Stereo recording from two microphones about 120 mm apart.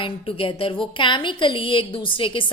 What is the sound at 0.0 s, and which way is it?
A woman's voice, 50° left (ahead or behind).